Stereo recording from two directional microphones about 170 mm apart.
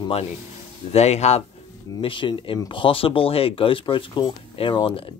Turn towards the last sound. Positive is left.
turn(degrees=30)  # may be behind; listen again after turning